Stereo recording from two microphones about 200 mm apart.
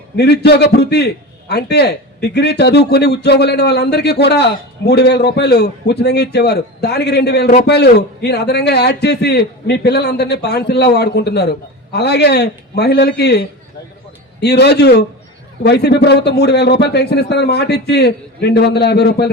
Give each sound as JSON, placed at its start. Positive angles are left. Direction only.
{"t": 0.2, "sound": "a man's voice", "side_deg": 55}
{"t": 14.4, "sound": "a man's voice", "side_deg": 55}